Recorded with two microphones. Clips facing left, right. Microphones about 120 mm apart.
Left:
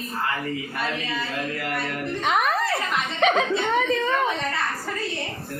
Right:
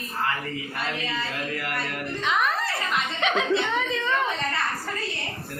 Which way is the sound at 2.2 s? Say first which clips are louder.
Left 2 dB; 55° left (ahead or behind).